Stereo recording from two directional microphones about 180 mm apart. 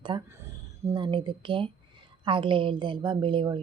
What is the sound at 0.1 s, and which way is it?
A woman's voice, 25° right (ahead or behind).